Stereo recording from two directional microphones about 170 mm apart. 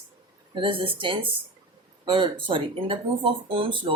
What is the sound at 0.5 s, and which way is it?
Speech, 30° right (ahead or behind).